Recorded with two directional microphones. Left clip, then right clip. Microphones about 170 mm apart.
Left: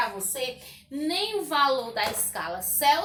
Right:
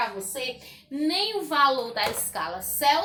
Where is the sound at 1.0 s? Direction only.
25° right (ahead or behind).